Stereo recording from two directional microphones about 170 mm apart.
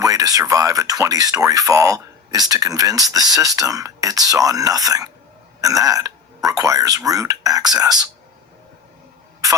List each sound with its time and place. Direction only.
0.0 s speech: 20° right (ahead or behind)